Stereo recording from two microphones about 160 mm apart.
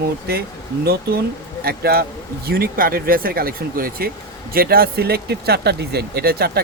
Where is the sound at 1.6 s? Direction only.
70° right (ahead or behind).